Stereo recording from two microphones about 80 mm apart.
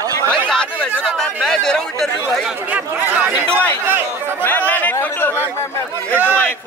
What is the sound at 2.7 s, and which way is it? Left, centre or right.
Speech, centre.